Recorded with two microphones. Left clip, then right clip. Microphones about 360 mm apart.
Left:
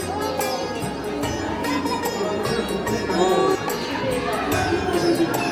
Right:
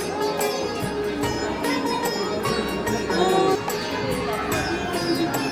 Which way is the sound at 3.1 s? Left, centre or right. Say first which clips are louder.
Left 1 dB; centre.